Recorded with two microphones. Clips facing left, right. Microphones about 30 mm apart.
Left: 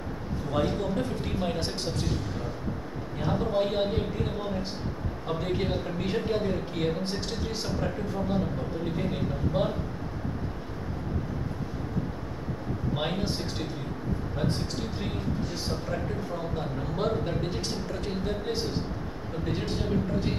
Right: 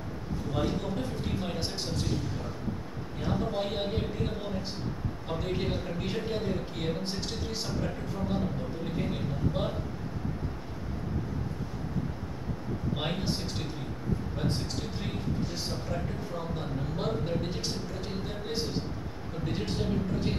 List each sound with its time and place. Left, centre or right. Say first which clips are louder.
0.5 s a man's voice: left 4 dB; centre
3.2 s speech: left 4 dB; centre
5.3 s a man's voice: left 3 dB; centre
12.9 s speech: left 3 dB; centre
16.5 s speech: left 3 dB; centre